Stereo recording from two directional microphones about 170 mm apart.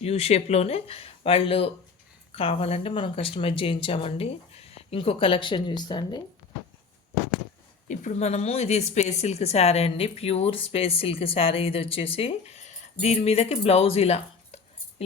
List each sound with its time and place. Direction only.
0.0 s a woman's voice: 35° left (ahead or behind)
7.9 s a woman's voice: 45° left (ahead or behind)